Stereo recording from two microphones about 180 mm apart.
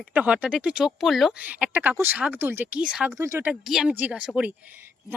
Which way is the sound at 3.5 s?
5° right (ahead or behind).